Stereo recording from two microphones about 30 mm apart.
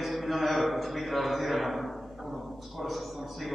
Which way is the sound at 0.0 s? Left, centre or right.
Centre.